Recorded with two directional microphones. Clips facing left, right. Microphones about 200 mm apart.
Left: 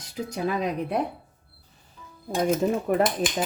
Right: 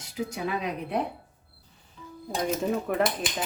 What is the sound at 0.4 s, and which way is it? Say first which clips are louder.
Speech: left 7 dB; 40° left (ahead or behind).